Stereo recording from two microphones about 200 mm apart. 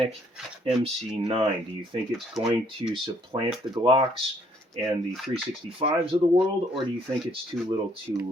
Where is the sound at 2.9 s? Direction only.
25° right (ahead or behind).